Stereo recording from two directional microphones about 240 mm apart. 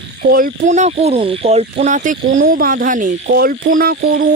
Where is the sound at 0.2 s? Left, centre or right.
Right.